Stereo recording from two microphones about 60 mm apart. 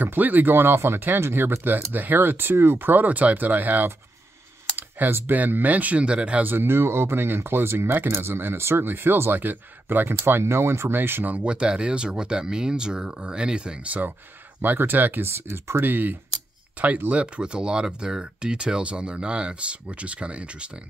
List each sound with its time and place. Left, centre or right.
0.0 s speech: right
6.4 s speech: right
11.3 s speech: centre
14.6 s speech: right